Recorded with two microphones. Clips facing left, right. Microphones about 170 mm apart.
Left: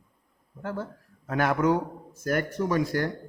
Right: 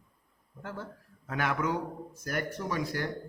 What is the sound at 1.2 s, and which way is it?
A man's voice, 40° left (ahead or behind).